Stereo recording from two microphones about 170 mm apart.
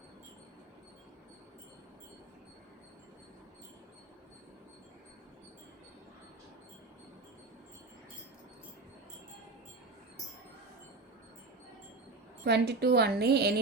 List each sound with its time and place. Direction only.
12.5 s a woman's voice: 75° right (ahead or behind)